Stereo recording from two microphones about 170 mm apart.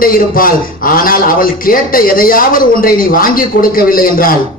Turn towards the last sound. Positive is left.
turn(degrees=55)  # may be behind; listen again after turning